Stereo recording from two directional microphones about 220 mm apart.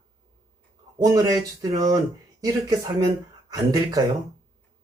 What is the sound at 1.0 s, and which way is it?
Speech, 15° right (ahead or behind).